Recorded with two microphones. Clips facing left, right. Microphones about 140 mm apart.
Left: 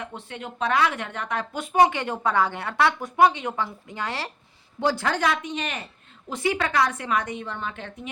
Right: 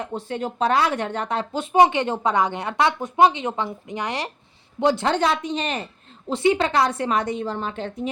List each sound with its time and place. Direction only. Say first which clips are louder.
0.0 s a woman's voice: right 8 dB; 35° right (ahead or behind)